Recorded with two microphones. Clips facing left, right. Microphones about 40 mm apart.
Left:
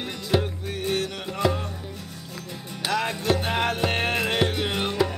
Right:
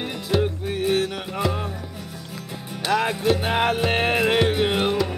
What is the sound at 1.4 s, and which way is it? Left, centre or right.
Music, centre.